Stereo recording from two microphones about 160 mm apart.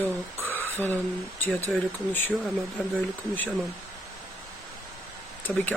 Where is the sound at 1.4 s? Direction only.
10° left (ahead or behind).